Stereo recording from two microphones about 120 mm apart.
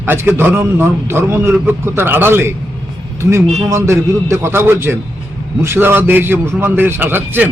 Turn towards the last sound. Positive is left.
turn(degrees=-15)  # may be behind; listen again after turning